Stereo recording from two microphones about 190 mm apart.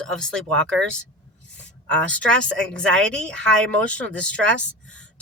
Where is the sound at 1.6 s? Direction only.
5° left (ahead or behind).